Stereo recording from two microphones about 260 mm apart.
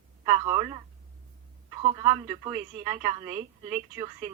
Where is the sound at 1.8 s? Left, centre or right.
Right.